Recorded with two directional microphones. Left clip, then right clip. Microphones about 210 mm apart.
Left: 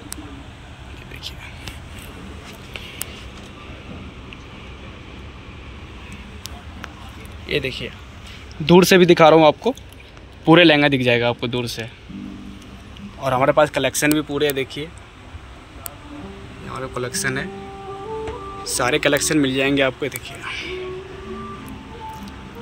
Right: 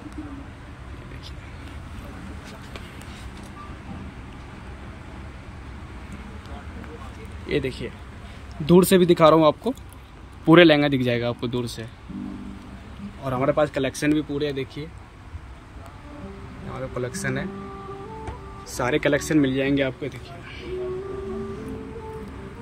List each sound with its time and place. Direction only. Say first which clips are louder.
7.4 s speech: left 3 dB; 10° right (ahead or behind)
13.2 s speech: left 6 dB; 5° right (ahead or behind)
16.7 s speech: left 4 dB; 15° right (ahead or behind)
18.6 s speech: left 4 dB; 15° right (ahead or behind)